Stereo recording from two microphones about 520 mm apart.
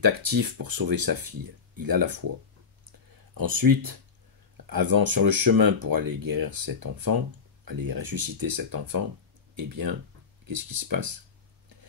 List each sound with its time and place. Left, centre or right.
0.0 s speech: right
3.3 s speech: right